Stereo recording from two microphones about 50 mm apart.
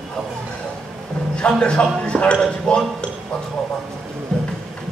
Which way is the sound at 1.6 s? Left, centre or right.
Centre.